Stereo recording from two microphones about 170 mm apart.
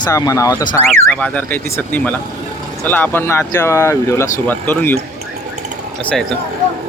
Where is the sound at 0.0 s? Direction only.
20° left (ahead or behind).